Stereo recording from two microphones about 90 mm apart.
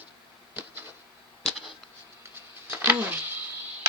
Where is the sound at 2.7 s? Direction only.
25° right (ahead or behind).